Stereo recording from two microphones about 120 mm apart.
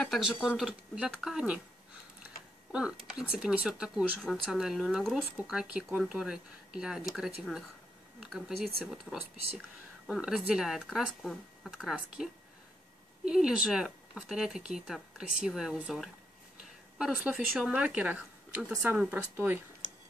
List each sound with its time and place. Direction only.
0.0 s speech: centre (ahead or behind)
2.7 s a woman's voice: 5° right (ahead or behind)